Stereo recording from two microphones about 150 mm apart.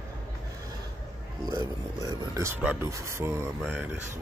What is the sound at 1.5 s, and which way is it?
Speech, 25° right (ahead or behind).